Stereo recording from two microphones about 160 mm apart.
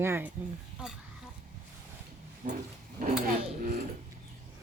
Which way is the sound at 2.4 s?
55° right (ahead or behind).